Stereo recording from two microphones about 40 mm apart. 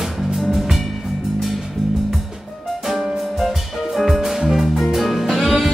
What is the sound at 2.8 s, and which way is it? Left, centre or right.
Music, centre.